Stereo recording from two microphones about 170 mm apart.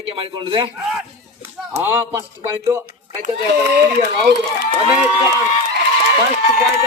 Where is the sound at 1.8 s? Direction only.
15° right (ahead or behind).